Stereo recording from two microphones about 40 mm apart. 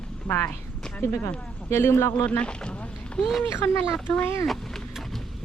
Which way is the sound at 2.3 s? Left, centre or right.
Left.